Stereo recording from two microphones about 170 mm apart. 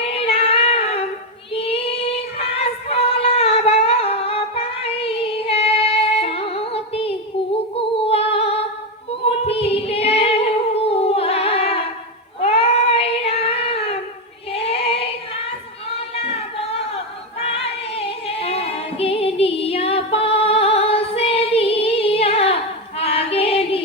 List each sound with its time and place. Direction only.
0.0 s female singing: 35° left (ahead or behind)
2.9 s humming: 35° left (ahead or behind)
7.8 s music: 35° left (ahead or behind)
9.2 s singing: 35° left (ahead or behind)
12.4 s child singing: 35° left (ahead or behind)
14.5 s female singing: 35° left (ahead or behind)
17.4 s female singing: 35° left (ahead or behind)